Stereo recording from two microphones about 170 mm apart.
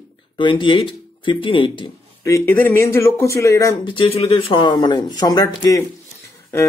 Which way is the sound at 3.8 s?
30° left (ahead or behind).